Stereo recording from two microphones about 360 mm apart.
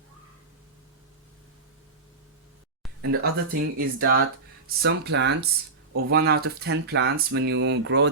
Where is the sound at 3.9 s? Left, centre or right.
Right.